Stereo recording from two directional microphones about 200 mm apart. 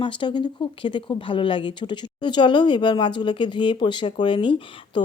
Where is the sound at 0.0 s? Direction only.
25° left (ahead or behind).